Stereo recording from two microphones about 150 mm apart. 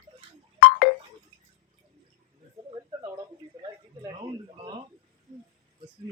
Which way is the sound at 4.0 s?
30° right (ahead or behind).